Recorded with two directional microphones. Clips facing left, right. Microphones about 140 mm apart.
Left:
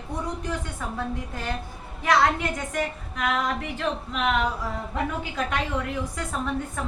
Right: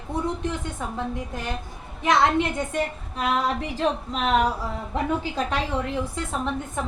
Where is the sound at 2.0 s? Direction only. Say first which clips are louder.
Right 2 dB; 25° right (ahead or behind).